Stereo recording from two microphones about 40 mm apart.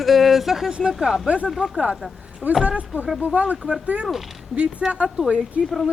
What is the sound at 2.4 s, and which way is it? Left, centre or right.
Speech, right.